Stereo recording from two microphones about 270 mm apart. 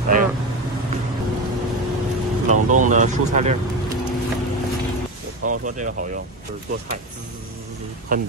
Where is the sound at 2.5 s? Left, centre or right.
Right.